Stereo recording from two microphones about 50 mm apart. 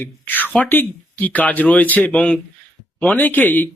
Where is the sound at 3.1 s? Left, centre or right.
Left.